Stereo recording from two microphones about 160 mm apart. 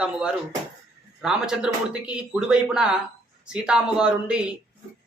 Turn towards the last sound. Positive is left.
turn(degrees=-5)  # may be behind; listen again after turning